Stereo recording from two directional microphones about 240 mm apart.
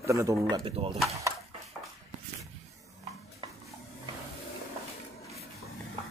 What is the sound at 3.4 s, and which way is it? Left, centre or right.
Stir, centre.